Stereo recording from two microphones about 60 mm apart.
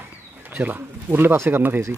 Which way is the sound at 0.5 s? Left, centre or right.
Right.